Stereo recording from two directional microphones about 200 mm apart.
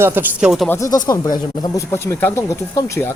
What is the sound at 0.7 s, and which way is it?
Speech, 15° left (ahead or behind).